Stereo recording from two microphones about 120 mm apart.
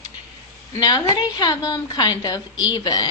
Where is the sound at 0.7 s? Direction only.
30° left (ahead or behind).